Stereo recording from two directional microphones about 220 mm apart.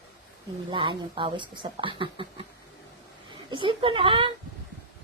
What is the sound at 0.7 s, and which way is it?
Speech, 20° right (ahead or behind).